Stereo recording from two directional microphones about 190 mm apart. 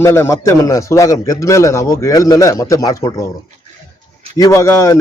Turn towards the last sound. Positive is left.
turn(degrees=15)  # may be behind; listen again after turning